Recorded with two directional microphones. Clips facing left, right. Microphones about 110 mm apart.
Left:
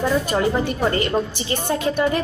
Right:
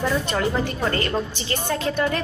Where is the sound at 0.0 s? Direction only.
15° left (ahead or behind).